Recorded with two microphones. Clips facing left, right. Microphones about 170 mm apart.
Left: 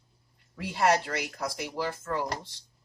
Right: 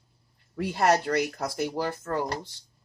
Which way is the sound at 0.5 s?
50° right (ahead or behind).